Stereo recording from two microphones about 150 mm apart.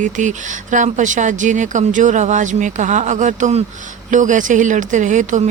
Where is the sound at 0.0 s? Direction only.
55° right (ahead or behind).